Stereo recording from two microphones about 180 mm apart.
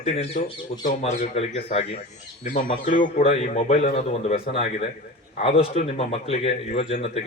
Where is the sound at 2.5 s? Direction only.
45° left (ahead or behind).